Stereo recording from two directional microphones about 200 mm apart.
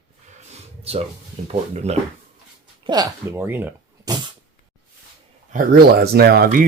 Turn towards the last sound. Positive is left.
turn(degrees=-45)  # may be behind; listen again after turning